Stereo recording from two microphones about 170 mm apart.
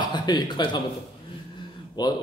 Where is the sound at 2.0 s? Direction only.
25° left (ahead or behind).